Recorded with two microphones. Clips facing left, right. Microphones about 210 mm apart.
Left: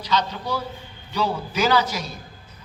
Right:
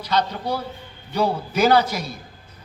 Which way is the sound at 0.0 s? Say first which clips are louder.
Right 2 dB; 55° right (ahead or behind).